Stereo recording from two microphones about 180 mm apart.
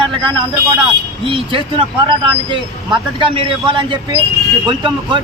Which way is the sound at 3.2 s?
30° right (ahead or behind).